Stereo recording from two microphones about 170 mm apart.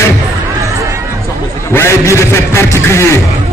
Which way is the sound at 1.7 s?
15° left (ahead or behind).